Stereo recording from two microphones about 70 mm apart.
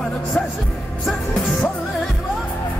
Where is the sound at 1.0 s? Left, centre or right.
Centre.